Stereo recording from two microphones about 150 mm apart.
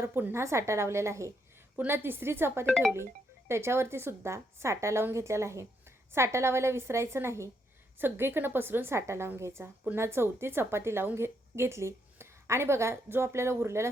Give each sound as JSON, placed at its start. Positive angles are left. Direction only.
{"t": 0.0, "sound": "a woman's voice", "side_deg": -15}
{"t": 2.6, "sound": "speech", "side_deg": 5}
{"t": 3.5, "sound": "a woman's voice", "side_deg": -15}